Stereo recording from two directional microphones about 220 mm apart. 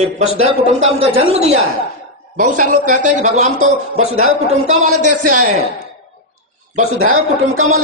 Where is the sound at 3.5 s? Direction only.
70° right (ahead or behind).